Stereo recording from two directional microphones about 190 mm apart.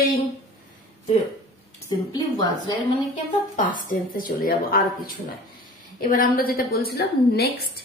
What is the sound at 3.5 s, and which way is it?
Speech, 45° left (ahead or behind).